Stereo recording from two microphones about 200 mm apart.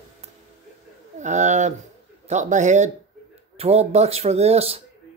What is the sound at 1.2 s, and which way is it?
Speech, 35° right (ahead or behind).